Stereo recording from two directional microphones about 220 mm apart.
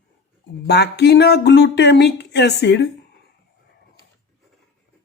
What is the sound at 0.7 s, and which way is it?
Speech, 50° left (ahead or behind).